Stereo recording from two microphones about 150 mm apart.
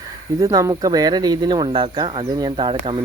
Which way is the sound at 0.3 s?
20° right (ahead or behind).